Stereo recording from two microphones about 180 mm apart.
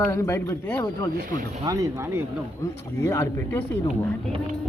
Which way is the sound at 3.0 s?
15° left (ahead or behind).